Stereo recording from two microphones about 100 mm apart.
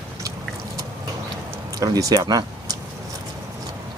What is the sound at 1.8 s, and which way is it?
Speech, 35° right (ahead or behind).